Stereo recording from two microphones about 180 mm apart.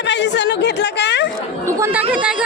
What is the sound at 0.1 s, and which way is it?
A woman's voice, 75° left (ahead or behind).